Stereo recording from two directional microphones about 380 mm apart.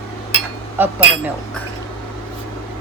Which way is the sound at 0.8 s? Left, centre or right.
Centre.